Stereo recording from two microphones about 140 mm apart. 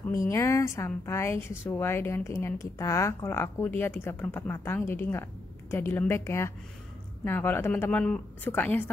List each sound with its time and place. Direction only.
0.3 s a woman's voice: 20° left (ahead or behind)